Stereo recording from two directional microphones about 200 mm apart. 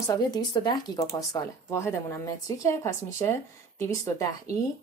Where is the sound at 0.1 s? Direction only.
20° left (ahead or behind).